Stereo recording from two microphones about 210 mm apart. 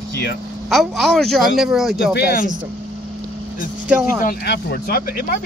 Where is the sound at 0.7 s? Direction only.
Centre (ahead or behind).